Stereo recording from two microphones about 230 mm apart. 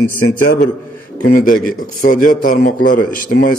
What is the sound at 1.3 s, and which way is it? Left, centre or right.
A man's voice, left.